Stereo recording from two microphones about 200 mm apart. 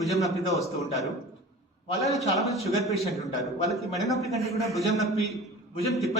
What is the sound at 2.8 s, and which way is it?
A man's voice, centre (ahead or behind).